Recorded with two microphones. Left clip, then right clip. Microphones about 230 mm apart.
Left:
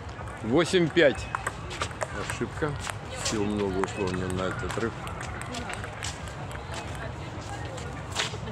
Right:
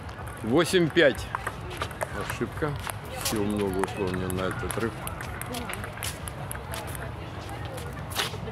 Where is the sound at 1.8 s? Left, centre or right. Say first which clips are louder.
Right 1 dB; left.